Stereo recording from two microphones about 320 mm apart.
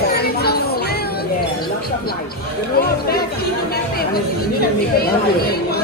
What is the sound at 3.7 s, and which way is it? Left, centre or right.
Speech, left.